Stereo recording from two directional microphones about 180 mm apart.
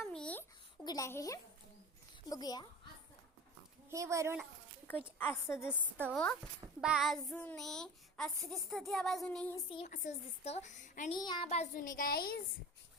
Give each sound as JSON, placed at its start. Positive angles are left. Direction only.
{"t": 0.0, "sound": "a sound", "side_deg": 5}
{"t": 0.9, "sound": "a woman's voice", "side_deg": 15}
{"t": 3.8, "sound": "speech", "side_deg": -15}
{"t": 5.2, "sound": "a woman's voice", "side_deg": 15}
{"t": 6.1, "sound": "child singing", "side_deg": 5}
{"t": 9.8, "sound": "a woman's voice", "side_deg": 45}
{"t": 11.1, "sound": "a woman's voice", "side_deg": 25}
{"t": 11.4, "sound": "a woman's voice", "side_deg": 35}